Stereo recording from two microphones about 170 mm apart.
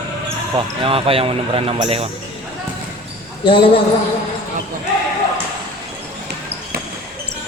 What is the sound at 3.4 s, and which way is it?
Speech, 30° left (ahead or behind).